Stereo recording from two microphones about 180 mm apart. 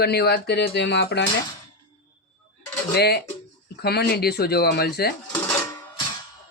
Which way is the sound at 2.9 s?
65° left (ahead or behind).